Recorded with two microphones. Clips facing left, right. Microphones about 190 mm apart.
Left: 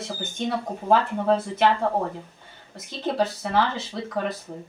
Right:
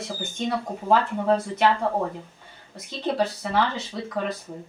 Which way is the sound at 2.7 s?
Centre (ahead or behind).